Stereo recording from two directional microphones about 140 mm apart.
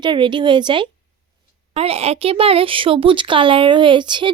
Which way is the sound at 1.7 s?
45° right (ahead or behind).